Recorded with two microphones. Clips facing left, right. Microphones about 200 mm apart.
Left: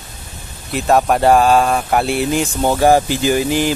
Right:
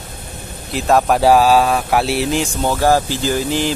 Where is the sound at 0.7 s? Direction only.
Centre (ahead or behind).